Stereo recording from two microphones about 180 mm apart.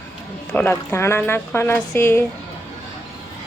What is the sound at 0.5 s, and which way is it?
A woman's voice, 10° left (ahead or behind).